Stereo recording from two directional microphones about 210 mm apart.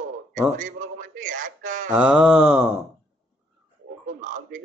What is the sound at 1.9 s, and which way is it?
Speech, 5° right (ahead or behind).